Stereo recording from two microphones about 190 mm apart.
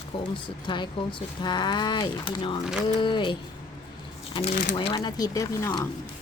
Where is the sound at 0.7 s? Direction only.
25° left (ahead or behind).